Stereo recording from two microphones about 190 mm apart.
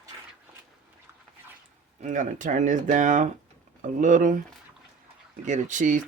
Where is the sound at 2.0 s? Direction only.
40° right (ahead or behind).